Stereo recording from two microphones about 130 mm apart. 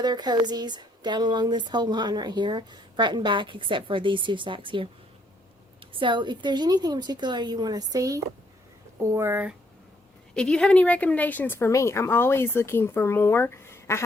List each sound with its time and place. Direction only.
0.0 s speech: 35° right (ahead or behind); by 9.6 s 15° right (ahead or behind)
10.3 s speech: 5° left (ahead or behind)